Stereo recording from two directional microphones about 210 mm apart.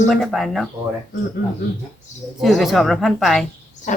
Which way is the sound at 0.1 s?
Centre (ahead or behind).